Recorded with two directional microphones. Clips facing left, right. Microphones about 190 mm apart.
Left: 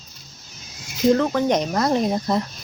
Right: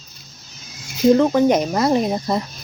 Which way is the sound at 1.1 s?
15° right (ahead or behind).